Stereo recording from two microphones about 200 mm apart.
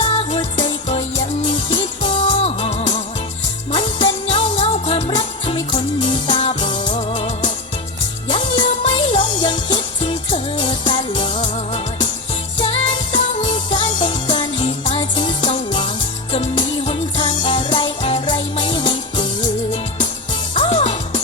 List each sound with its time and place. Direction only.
0.0 s music: 30° left (ahead or behind)
1.5 s music: 30° left (ahead or behind)
20.6 s music: 30° left (ahead or behind)